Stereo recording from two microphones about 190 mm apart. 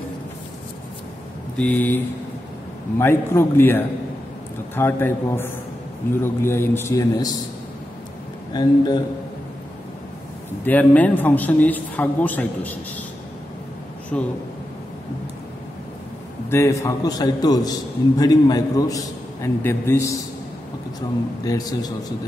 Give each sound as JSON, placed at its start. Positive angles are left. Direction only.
{"t": 1.6, "sound": "a man's voice", "side_deg": 10}
{"t": 8.5, "sound": "a man's voice", "side_deg": 25}
{"t": 10.6, "sound": "a man's voice", "side_deg": 10}
{"t": 14.1, "sound": "a man's voice", "side_deg": 5}
{"t": 16.4, "sound": "a man's voice", "side_deg": 15}
{"t": 21.5, "sound": "a man's voice", "side_deg": 20}